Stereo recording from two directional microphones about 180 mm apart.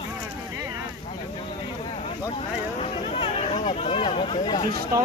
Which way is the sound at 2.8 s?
30° left (ahead or behind).